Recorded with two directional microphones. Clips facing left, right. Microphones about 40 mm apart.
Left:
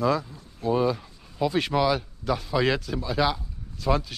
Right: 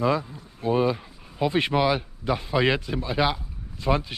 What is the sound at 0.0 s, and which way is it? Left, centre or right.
Speech, right.